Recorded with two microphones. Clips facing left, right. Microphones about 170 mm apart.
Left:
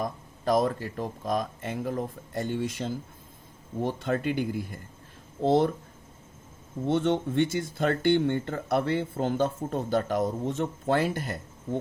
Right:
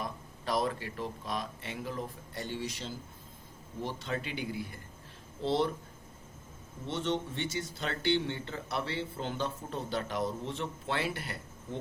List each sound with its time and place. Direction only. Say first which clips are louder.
0.0 s speech: left 8 dB; 45° left (ahead or behind)
6.8 s speech: left 8 dB; 55° left (ahead or behind)